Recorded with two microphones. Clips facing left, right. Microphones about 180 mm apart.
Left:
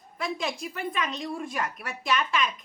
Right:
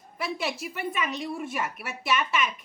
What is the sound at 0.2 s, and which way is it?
A woman's voice, 5° right (ahead or behind).